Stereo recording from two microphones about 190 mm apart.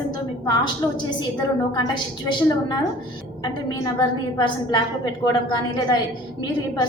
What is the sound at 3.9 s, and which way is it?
A woman's voice, 20° left (ahead or behind).